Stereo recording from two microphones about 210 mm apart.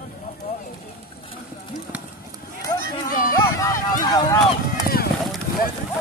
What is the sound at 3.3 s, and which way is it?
Run, 15° left (ahead or behind).